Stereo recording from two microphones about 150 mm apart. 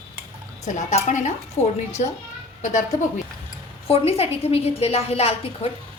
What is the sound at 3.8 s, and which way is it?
A woman's voice, 40° left (ahead or behind).